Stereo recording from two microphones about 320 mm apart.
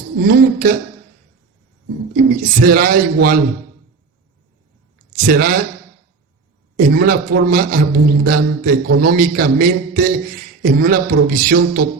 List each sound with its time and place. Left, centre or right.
0.3 s a man's voice: right
2.3 s a man's voice: right
5.1 s a man's voice: right
6.7 s a man's voice: right